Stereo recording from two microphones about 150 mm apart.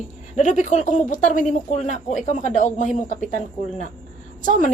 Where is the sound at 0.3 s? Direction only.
55° left (ahead or behind).